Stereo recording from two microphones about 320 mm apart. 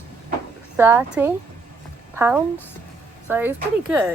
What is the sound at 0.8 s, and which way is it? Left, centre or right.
A woman's voice, centre.